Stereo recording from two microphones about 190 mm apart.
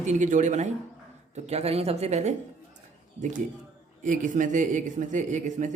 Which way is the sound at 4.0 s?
40° right (ahead or behind).